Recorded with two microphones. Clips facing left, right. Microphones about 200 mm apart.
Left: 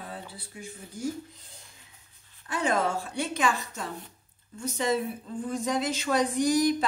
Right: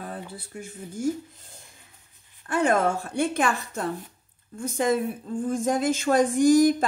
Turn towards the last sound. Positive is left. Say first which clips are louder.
# right 6 dB
turn(degrees=-50)  # may be behind; listen again after turning